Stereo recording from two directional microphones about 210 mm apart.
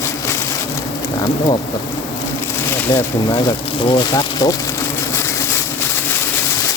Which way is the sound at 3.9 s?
20° left (ahead or behind).